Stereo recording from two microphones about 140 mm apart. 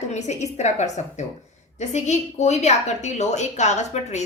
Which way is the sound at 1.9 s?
55° left (ahead or behind).